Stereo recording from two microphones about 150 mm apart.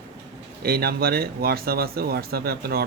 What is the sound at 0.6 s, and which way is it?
Speech, 90° right.